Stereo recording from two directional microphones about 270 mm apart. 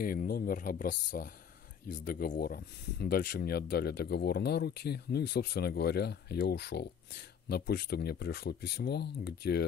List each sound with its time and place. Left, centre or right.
0.0 s speech: left